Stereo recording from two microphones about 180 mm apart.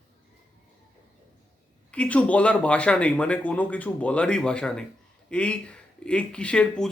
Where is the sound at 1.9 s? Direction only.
5° left (ahead or behind).